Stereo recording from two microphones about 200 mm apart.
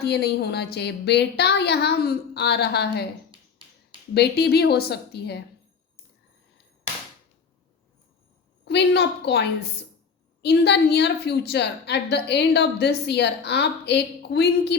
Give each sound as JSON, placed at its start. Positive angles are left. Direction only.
{"t": 0.0, "sound": "a woman's voice", "side_deg": 55}
{"t": 4.1, "sound": "a woman's voice", "side_deg": 55}
{"t": 8.6, "sound": "a woman's voice", "side_deg": 60}
{"t": 10.4, "sound": "a woman's voice", "side_deg": 55}